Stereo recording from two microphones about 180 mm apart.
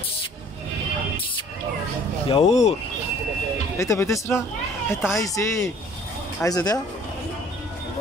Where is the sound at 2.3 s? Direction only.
35° left (ahead or behind).